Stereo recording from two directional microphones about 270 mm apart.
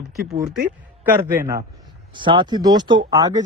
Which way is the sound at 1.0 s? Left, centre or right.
Centre.